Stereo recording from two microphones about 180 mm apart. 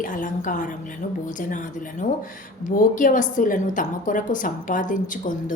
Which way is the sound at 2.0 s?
45° left (ahead or behind).